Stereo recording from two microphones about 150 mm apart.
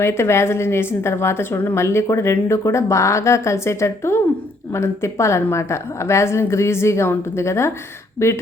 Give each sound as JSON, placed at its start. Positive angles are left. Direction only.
{"t": 0.0, "sound": "a woman's voice", "side_deg": 15}